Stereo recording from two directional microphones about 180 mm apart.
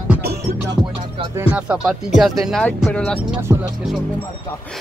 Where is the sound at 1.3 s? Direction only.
5° right (ahead or behind).